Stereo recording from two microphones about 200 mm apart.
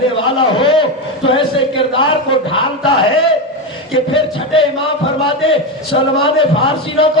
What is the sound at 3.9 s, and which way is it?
A man's voice, 25° left (ahead or behind).